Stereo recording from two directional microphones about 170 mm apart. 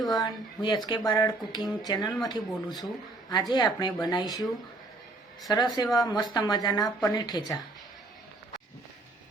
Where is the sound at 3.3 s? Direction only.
25° left (ahead or behind).